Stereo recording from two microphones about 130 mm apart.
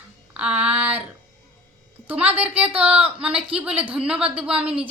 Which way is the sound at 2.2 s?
10° right (ahead or behind).